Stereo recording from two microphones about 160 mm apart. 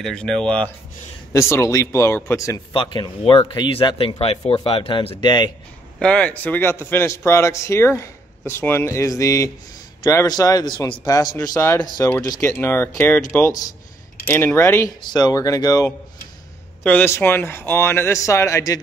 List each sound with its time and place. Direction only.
0.0 s speech: 5° left (ahead or behind)
1.3 s speech: 20° left (ahead or behind)
2.7 s speech: 30° left (ahead or behind)
5.9 s speech: 5° left (ahead or behind)
15.0 s speech: 25° left (ahead or behind)
16.8 s speech: 10° left (ahead or behind)